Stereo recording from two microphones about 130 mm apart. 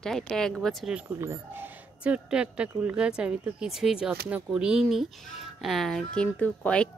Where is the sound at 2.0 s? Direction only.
10° right (ahead or behind); by 6.8 s 10° left (ahead or behind).